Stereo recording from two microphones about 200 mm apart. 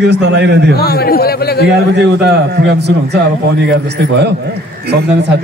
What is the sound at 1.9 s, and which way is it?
A man's voice, 55° right (ahead or behind).